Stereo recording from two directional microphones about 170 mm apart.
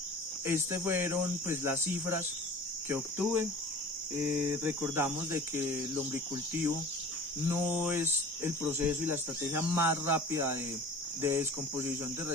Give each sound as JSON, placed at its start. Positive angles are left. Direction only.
{"t": 0.4, "sound": "speech", "side_deg": -15}
{"t": 7.4, "sound": "speech", "side_deg": -15}